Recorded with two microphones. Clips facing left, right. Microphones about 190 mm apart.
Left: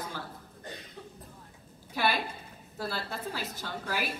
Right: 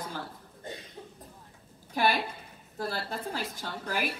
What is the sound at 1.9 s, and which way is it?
A woman's voice, 45° right (ahead or behind).